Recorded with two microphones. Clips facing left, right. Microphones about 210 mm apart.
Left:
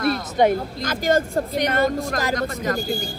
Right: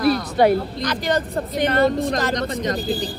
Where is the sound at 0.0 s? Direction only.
Centre (ahead or behind).